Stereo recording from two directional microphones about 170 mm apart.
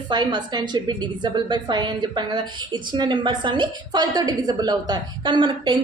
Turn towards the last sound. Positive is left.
turn(degrees=-30)  # may be behind; listen again after turning